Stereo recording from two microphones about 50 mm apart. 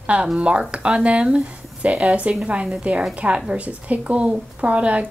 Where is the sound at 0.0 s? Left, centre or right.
Right.